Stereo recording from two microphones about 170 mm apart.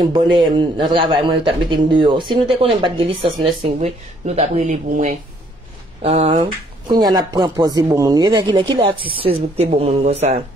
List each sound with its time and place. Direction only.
0.0 s a man's voice: 25° right (ahead or behind); by 5.1 s 45° right (ahead or behind)
6.0 s a man's voice: 35° right (ahead or behind)